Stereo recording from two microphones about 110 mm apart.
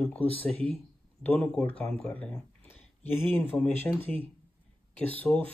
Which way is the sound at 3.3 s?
15° left (ahead or behind).